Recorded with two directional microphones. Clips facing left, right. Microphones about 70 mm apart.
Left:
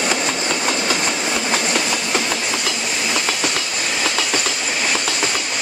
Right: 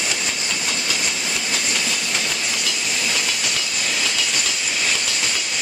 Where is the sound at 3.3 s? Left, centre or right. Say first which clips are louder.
Left 4 dB; left.